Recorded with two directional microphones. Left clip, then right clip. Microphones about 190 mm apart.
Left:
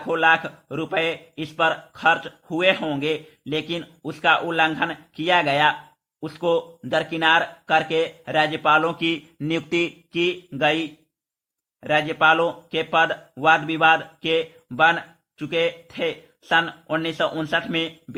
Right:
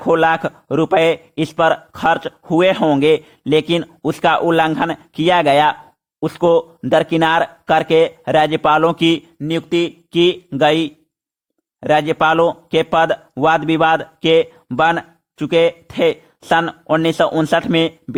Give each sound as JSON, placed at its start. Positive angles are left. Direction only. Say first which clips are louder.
{"t": 0.0, "sound": "speech", "louder": "right 5 dB", "side_deg": -45}
{"t": 9.5, "sound": "speech", "louder": "right 5 dB", "side_deg": -25}
{"t": 10.1, "sound": "speech", "louder": "right 9 dB", "side_deg": -40}